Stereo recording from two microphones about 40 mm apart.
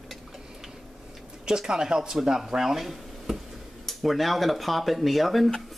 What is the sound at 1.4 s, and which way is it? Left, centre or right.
Speech, centre.